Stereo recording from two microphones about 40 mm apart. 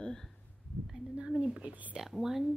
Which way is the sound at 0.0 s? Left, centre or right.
Centre.